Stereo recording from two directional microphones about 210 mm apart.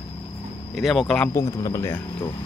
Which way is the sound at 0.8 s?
Centre (ahead or behind).